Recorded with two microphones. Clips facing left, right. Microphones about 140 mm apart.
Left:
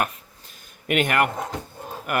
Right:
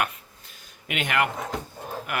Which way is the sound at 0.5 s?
50° left (ahead or behind).